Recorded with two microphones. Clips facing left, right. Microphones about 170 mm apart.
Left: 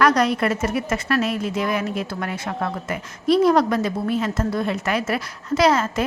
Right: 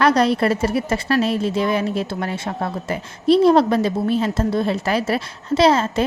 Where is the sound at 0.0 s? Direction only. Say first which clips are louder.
Right 2 dB; 30° right (ahead or behind).